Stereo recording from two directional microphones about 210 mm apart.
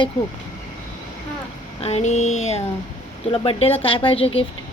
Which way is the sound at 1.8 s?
30° left (ahead or behind).